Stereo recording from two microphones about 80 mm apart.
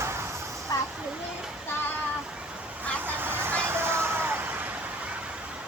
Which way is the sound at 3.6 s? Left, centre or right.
Right.